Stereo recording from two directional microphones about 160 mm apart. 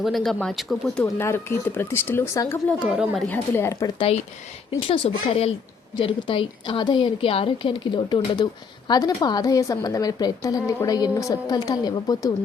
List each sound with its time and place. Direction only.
0.0 s speech: centre (ahead or behind)
1.0 s speech: 15° left (ahead or behind)
2.8 s speech: 5° right (ahead or behind)
3.2 s speech: 15° left (ahead or behind)
4.7 s a woman's voice: 35° left (ahead or behind)